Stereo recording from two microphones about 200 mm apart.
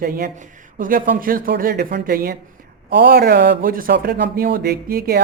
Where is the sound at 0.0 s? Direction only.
45° right (ahead or behind).